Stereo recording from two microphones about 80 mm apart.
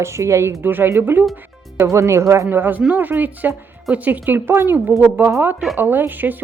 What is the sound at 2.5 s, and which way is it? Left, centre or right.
Speech, right.